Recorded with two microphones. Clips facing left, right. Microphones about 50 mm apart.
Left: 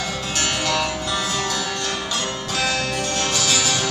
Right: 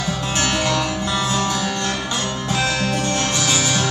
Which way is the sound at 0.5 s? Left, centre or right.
Right.